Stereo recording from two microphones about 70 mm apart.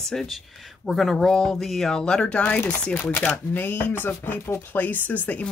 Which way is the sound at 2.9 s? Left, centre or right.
Left.